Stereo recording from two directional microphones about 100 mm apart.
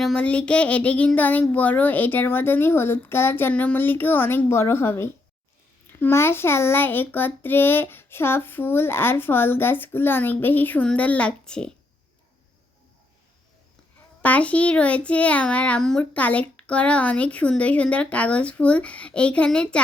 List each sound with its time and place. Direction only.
0.0 s a child's voice: 10° left (ahead or behind)
14.2 s a child's voice: 15° left (ahead or behind)